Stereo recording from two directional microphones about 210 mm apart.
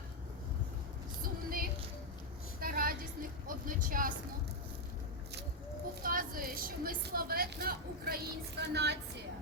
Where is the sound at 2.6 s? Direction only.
40° right (ahead or behind).